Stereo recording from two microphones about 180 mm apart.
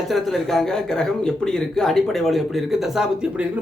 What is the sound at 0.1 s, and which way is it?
A man's voice, centre (ahead or behind).